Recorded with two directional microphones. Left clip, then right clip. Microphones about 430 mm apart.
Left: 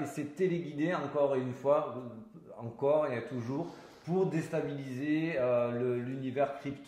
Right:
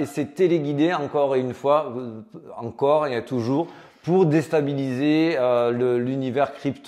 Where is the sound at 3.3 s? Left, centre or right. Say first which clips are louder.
Right 14 dB; right.